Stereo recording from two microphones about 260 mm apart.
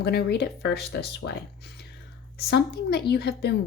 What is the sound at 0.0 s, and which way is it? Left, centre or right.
A woman's voice, left.